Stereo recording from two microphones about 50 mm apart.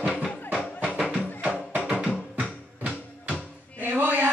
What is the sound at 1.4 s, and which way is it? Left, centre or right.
Music, right.